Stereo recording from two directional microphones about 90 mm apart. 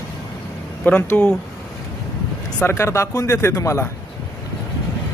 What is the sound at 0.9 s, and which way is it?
Speech, 20° left (ahead or behind).